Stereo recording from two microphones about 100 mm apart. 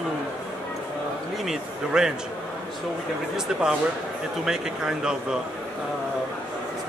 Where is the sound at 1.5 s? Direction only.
5° right (ahead or behind).